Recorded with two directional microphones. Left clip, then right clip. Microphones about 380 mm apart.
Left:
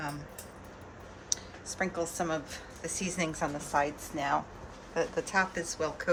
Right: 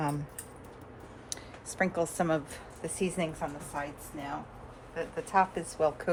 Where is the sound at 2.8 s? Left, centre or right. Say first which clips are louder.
Right 2 dB; centre.